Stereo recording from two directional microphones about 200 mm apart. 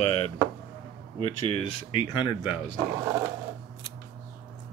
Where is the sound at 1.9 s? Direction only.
25° left (ahead or behind).